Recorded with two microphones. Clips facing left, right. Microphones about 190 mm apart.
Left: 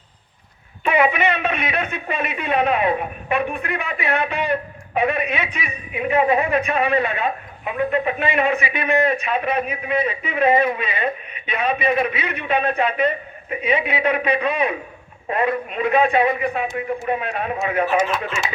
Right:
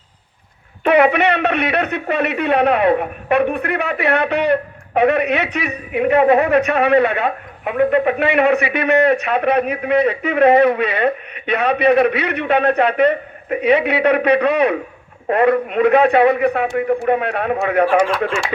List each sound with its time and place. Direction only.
0.9 s a man's voice: 65° right (ahead or behind)